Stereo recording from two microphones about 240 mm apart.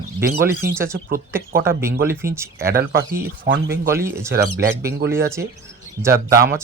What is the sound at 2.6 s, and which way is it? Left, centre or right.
Speech, right.